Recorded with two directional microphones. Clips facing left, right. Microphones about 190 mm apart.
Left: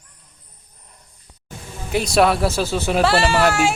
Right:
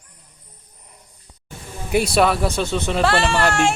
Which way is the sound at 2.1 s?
Centre (ahead or behind).